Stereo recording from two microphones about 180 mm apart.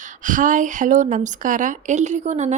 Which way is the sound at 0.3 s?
45° right (ahead or behind).